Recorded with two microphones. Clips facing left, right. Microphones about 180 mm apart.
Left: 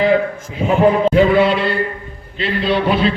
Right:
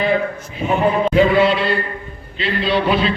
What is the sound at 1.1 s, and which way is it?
A man's voice, 55° left (ahead or behind).